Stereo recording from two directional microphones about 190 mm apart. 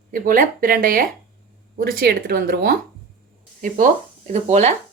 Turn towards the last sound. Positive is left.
turn(degrees=-35)  # may be behind; listen again after turning